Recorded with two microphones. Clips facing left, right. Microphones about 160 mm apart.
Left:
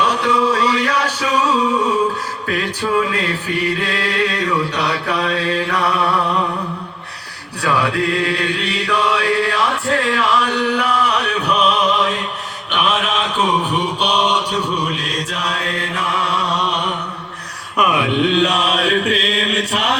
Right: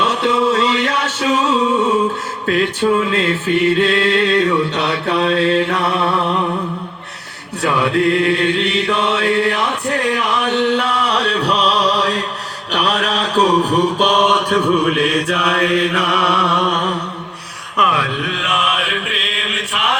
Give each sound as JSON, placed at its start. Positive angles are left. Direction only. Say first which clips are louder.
{"t": 0.0, "sound": "music", "louder": "right 1 dB", "side_deg": -25}
{"t": 3.1, "sound": "music", "louder": "right 5 dB", "side_deg": -25}
{"t": 7.6, "sound": "chant", "louder": "right 3 dB", "side_deg": -25}
{"t": 12.7, "sound": "mantra", "louder": "right 1 dB", "side_deg": -40}
{"t": 17.9, "sound": "mantra", "louder": "left 5 dB", "side_deg": 20}